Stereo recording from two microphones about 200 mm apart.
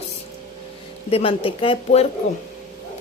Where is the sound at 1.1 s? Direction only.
30° left (ahead or behind).